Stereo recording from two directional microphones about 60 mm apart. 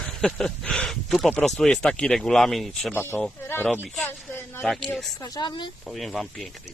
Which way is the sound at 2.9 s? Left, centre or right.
Left.